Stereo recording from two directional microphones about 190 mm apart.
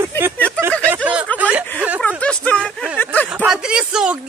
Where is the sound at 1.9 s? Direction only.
5° left (ahead or behind).